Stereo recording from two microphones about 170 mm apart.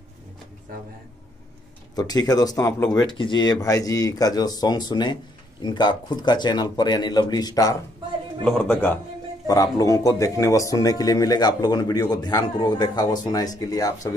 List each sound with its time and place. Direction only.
2.0 s speech: 25° left (ahead or behind)
8.5 s speech: 10° left (ahead or behind)